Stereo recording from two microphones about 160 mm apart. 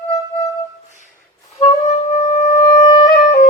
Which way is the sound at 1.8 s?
50° left (ahead or behind).